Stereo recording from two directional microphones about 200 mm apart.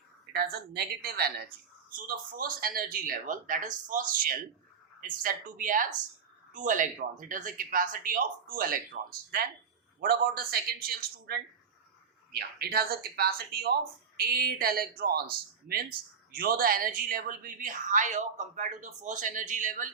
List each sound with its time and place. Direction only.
0.3 s speech: 50° right (ahead or behind)
10.0 s a woman's voice: 50° right (ahead or behind)